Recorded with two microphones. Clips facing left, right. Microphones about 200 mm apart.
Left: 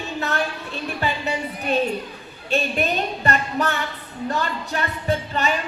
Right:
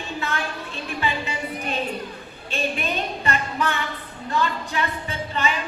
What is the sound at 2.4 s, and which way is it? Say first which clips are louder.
A woman's voice: left 4 dB; 40° left (ahead or behind).